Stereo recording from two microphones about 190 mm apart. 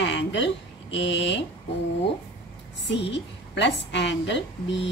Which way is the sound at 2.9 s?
70° left (ahead or behind).